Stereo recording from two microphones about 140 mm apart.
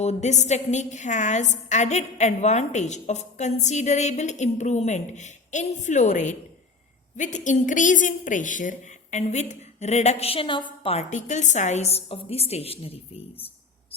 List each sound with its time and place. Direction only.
0.0 s a woman's voice: 55° left (ahead or behind)